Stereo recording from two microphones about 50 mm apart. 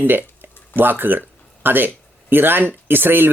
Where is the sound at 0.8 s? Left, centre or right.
Right.